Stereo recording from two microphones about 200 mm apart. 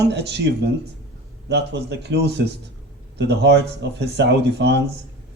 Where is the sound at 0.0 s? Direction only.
55° right (ahead or behind).